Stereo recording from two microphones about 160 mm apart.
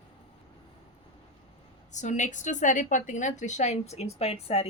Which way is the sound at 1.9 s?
50° left (ahead or behind).